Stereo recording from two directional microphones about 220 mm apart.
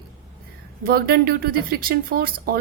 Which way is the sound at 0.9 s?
45° right (ahead or behind).